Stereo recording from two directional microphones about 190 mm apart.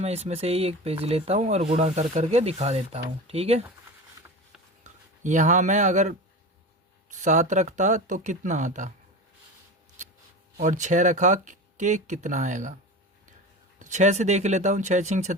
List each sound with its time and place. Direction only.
0.0 s speech: 35° right (ahead or behind)
4.8 s speech: 40° right (ahead or behind)
10.6 s speech: 40° right (ahead or behind)
13.7 s speech: 40° right (ahead or behind)